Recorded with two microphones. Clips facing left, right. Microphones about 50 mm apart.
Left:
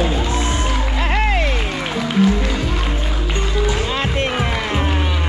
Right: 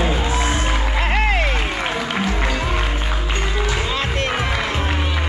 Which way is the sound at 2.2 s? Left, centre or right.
Right.